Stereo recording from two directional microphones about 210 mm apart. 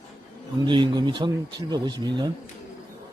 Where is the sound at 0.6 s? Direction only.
20° right (ahead or behind).